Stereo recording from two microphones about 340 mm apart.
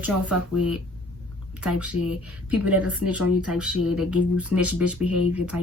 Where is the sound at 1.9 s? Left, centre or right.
Centre.